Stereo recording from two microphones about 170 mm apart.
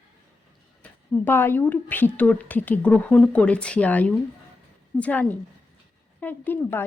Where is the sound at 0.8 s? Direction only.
10° left (ahead or behind).